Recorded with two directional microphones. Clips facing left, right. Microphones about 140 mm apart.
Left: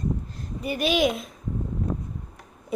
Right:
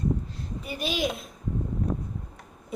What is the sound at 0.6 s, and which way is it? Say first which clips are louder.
Speech: left 7 dB; 70° left (ahead or behind).